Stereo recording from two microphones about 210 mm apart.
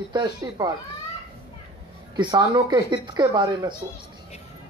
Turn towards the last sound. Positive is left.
turn(degrees=-20)  # may be behind; listen again after turning